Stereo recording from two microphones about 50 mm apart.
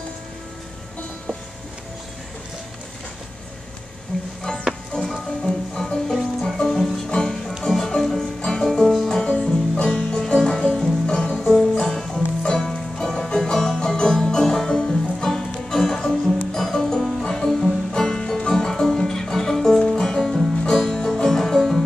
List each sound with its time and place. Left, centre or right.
4.1 s music: centre
7.1 s music: centre
8.7 s music: centre
9.3 s music: centre